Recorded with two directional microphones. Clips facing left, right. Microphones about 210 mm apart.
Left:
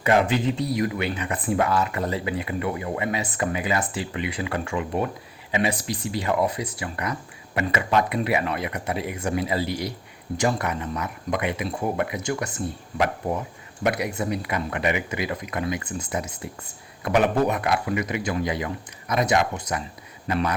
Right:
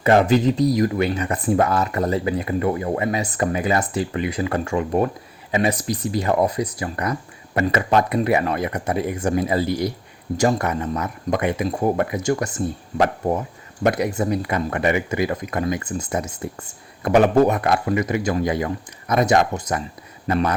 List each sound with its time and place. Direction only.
0.0 s speech: 40° right (ahead or behind)
13.8 s speech: 40° right (ahead or behind)